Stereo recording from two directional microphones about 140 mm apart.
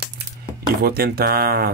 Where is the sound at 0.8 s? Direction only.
90° right.